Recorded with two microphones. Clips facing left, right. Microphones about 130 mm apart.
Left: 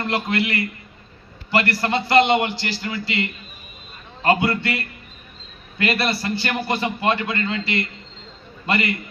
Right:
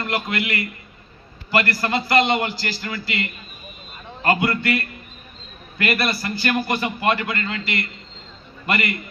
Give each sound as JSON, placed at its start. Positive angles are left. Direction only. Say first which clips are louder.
{"t": 0.0, "sound": "a man's voice", "louder": "left 2 dB", "side_deg": 25}